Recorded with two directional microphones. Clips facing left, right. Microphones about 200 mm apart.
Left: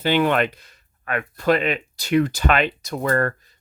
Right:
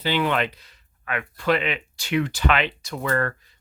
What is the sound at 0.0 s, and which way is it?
Speech, 50° left (ahead or behind).